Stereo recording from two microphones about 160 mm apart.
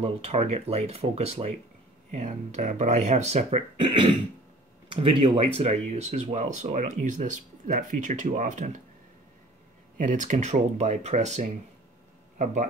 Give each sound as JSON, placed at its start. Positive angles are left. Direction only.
{"t": 0.0, "sound": "speech", "side_deg": -40}
{"t": 9.9, "sound": "speech", "side_deg": -50}